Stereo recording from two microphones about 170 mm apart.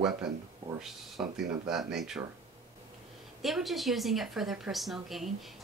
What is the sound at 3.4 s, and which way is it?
A woman's voice, centre (ahead or behind).